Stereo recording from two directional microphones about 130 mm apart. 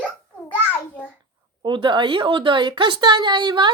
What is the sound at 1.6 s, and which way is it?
A woman's voice, 40° right (ahead or behind).